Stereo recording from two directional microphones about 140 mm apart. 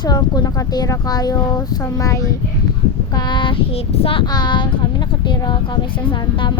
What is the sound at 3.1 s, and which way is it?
Child singing, 30° left (ahead or behind).